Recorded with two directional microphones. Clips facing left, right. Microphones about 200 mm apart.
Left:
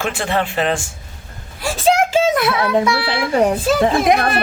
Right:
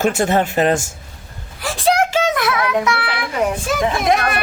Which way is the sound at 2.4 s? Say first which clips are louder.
Left 2 dB; 30° left (ahead or behind).